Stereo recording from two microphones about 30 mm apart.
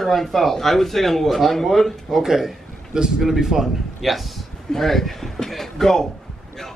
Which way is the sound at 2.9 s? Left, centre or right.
Right.